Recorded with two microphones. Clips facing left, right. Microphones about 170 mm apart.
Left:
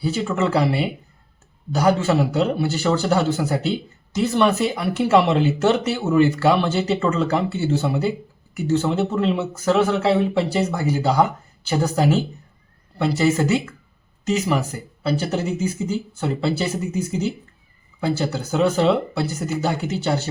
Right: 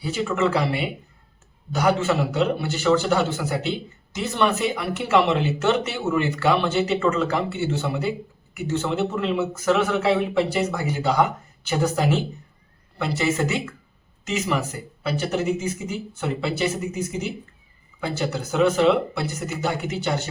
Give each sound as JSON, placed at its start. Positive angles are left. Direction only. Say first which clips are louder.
{"t": 0.0, "sound": "speech", "louder": "left 1 dB", "side_deg": 30}